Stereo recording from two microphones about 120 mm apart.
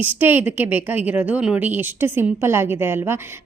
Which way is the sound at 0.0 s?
15° right (ahead or behind).